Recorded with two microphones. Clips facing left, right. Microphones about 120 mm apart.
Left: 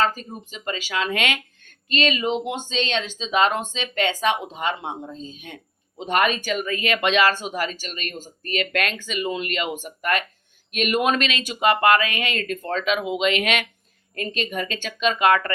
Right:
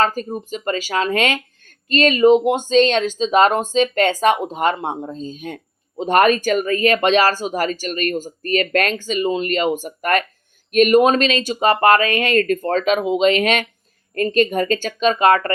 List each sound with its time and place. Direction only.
0.0 s speech: 45° right (ahead or behind)